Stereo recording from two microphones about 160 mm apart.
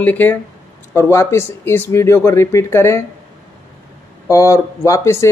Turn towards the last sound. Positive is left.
turn(degrees=15)  # may be behind; listen again after turning